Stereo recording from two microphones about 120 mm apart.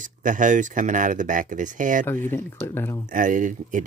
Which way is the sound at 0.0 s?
90° right.